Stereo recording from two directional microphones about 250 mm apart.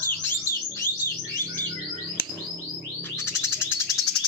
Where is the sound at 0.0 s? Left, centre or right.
Centre.